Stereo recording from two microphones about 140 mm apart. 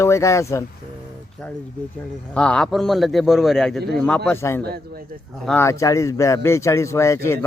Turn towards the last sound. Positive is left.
turn(degrees=20)  # may be behind; listen again after turning